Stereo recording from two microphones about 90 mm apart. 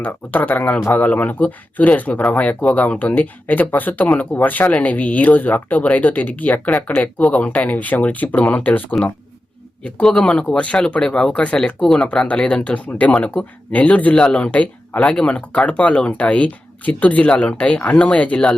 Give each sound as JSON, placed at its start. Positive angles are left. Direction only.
{"t": 0.0, "sound": "speech", "side_deg": 20}
{"t": 9.8, "sound": "speech", "side_deg": 5}